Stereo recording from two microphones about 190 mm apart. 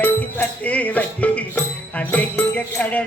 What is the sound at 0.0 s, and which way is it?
Music, 10° left (ahead or behind).